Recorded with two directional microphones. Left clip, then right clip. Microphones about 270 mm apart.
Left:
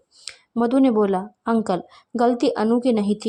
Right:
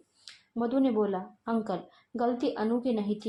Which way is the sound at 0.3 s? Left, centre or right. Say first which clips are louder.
Left 10 dB; left.